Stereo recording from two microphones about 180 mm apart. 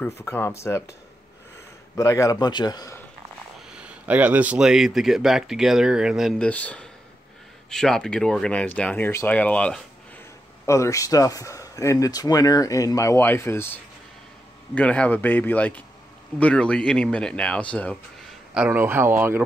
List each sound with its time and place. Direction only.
0.2 s speech: 10° left (ahead or behind)
2.0 s a man's voice: 20° left (ahead or behind)
3.7 s speech: 5° right (ahead or behind); by 13.7 s 15° left (ahead or behind)
14.8 s speech: 5° left (ahead or behind)
18.5 s speech: 5° right (ahead or behind)